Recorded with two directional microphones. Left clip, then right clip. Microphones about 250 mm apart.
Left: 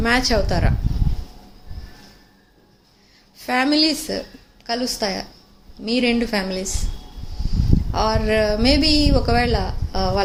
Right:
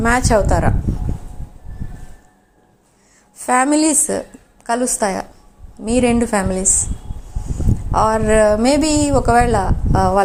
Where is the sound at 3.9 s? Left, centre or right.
Centre.